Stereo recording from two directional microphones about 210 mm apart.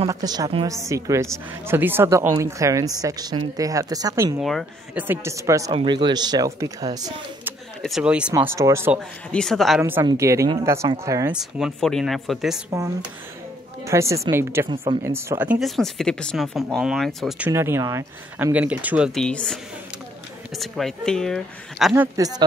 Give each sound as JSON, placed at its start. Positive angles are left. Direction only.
{"t": 0.1, "sound": "a woman's voice", "side_deg": -15}
{"t": 4.4, "sound": "speech", "side_deg": 0}
{"t": 5.0, "sound": "a woman's voice", "side_deg": -10}
{"t": 7.8, "sound": "a woman's voice", "side_deg": -5}
{"t": 9.3, "sound": "speech", "side_deg": 0}
{"t": 9.8, "sound": "a woman's voice", "side_deg": -10}
{"t": 13.8, "sound": "a woman's voice", "side_deg": -15}
{"t": 15.6, "sound": "speech", "side_deg": 0}
{"t": 17.5, "sound": "a woman's voice", "side_deg": -10}